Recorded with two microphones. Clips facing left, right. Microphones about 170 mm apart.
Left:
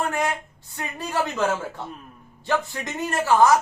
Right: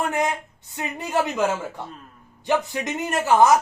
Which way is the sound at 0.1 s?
20° right (ahead or behind).